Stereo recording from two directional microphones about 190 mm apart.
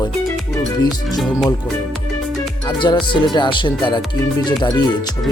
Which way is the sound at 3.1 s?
25° left (ahead or behind).